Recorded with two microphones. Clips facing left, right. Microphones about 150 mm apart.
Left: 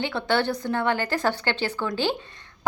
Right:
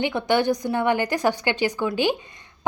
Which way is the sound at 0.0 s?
15° right (ahead or behind).